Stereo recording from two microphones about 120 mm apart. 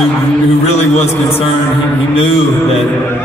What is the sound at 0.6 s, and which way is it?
Speech, 65° left (ahead or behind).